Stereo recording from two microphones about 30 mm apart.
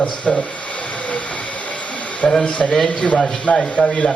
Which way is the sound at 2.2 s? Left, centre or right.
Left.